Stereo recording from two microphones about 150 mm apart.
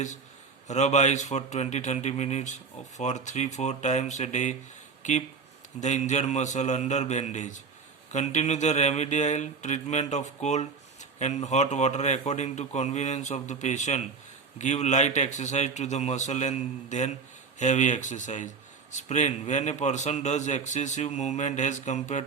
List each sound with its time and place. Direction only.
0.7 s a man's voice: 50° left (ahead or behind)